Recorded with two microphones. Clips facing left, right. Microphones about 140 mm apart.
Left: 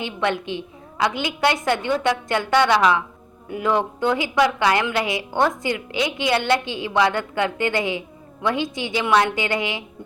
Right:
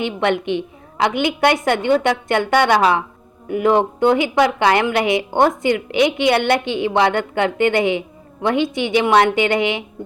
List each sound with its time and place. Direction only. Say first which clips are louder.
0.0 s a woman's voice: right 5 dB; 60° right (ahead or behind)